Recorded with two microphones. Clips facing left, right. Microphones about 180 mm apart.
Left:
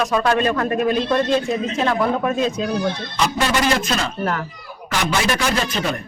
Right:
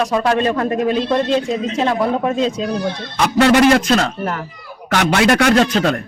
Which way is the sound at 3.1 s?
65° right (ahead or behind).